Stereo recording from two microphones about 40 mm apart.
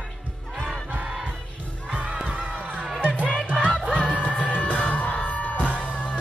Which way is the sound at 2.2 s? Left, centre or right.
Right.